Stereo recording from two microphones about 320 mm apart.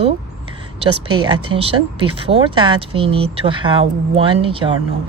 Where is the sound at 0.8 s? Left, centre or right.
Centre.